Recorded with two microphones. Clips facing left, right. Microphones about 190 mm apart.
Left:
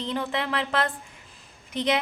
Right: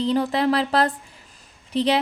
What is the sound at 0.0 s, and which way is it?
A woman's voice, 35° right (ahead or behind).